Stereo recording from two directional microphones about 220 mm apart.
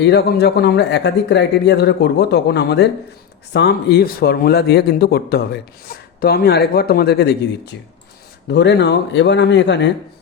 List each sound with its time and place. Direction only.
0.0 s speech: 50° left (ahead or behind)